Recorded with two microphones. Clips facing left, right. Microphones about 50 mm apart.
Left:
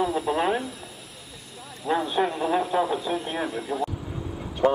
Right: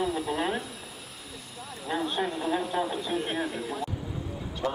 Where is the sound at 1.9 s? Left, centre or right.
Centre.